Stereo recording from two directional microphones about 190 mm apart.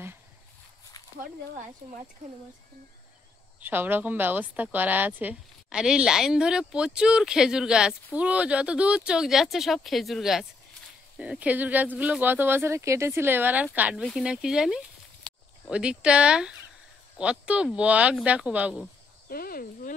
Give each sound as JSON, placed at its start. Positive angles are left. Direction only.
{"t": 3.6, "sound": "a woman's voice", "side_deg": -10}
{"t": 19.2, "sound": "speech", "side_deg": 50}